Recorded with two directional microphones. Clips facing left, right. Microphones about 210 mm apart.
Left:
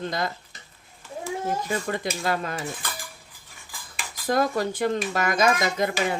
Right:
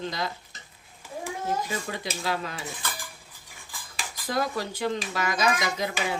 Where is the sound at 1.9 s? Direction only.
50° left (ahead or behind).